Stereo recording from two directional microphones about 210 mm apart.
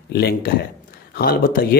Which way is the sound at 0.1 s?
50° left (ahead or behind).